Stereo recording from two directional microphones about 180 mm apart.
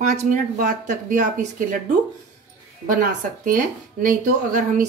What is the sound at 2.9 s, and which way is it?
Speech, 50° right (ahead or behind).